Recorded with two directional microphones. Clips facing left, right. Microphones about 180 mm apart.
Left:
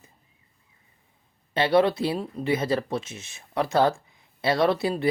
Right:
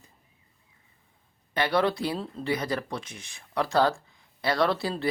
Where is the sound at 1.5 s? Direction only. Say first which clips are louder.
Left 5 dB; 25° left (ahead or behind).